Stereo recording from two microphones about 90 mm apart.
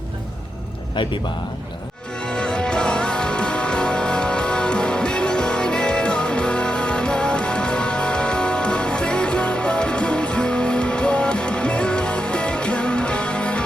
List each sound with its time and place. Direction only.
1.0 s speech: 60° left (ahead or behind)
2.2 s music: 10° left (ahead or behind)